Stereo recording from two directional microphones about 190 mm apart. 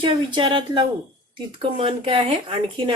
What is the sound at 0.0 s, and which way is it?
A woman's voice, 25° right (ahead or behind).